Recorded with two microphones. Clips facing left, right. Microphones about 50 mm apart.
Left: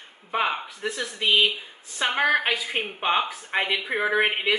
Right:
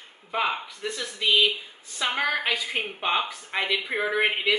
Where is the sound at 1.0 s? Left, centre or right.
Centre.